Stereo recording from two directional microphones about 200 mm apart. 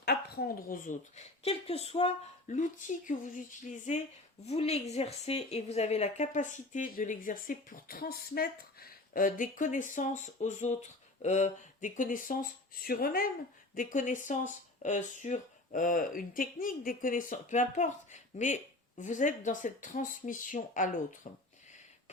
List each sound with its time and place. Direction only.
0.0 s speech: 50° left (ahead or behind)